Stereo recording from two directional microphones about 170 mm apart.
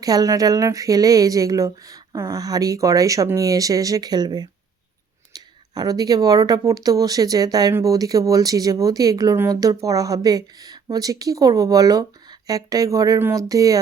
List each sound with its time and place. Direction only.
0.0 s speech: 20° right (ahead or behind)